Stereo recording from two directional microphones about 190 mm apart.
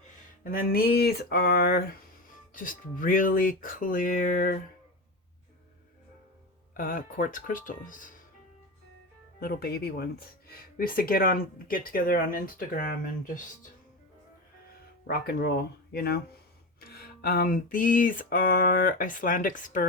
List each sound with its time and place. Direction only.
0.4 s speech: 50° left (ahead or behind)
6.7 s speech: 45° left (ahead or behind)
9.4 s speech: 55° left (ahead or behind)
15.0 s speech: 55° left (ahead or behind)